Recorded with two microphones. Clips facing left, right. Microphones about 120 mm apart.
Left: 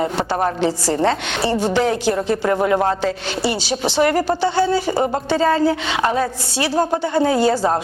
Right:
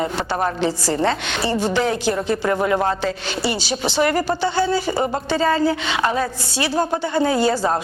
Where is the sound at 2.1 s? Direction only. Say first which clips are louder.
Left 2 dB; 30° left (ahead or behind).